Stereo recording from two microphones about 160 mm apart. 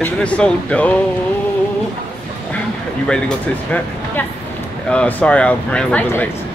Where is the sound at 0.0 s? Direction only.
5° left (ahead or behind).